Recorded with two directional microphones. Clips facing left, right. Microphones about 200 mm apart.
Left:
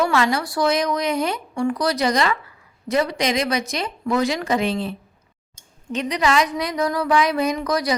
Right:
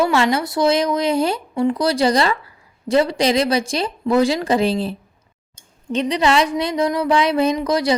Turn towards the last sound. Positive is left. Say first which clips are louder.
# right 4 dB
turn(degrees=-25)  # may be behind; listen again after turning